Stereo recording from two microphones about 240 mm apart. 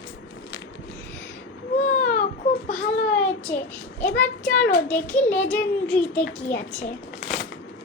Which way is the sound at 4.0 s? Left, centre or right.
Centre.